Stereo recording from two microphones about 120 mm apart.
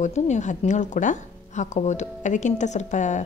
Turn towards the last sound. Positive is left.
turn(degrees=90)